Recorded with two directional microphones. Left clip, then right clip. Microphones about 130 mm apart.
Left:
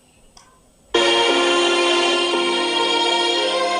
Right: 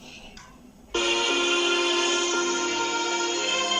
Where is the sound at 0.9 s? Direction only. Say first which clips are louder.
Left 8 dB; 55° left (ahead or behind).